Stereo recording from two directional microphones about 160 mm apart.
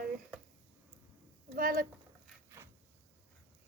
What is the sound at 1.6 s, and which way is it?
Speech, 60° right (ahead or behind).